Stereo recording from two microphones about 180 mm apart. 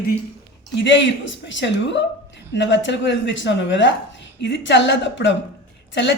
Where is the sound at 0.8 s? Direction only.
90° left.